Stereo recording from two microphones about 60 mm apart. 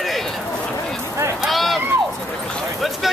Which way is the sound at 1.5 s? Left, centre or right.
Centre.